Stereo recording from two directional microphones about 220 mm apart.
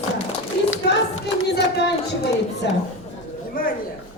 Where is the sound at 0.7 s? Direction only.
60° left (ahead or behind).